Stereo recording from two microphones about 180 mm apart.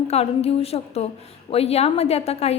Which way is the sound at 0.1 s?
35° left (ahead or behind).